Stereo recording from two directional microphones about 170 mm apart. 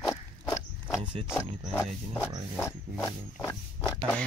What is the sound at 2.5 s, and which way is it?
Pig, 20° left (ahead or behind).